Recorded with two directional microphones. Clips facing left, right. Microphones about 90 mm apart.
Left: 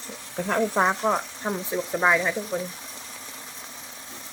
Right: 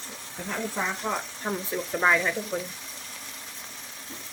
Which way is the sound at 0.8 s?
60° left (ahead or behind).